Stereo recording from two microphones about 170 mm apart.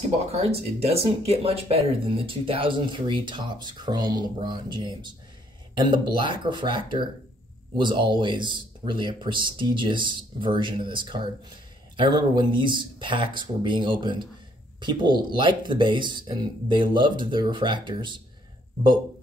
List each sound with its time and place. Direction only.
0.3 s speech: 35° right (ahead or behind)